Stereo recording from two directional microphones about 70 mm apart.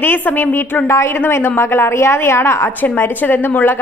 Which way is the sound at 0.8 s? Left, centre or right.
Left.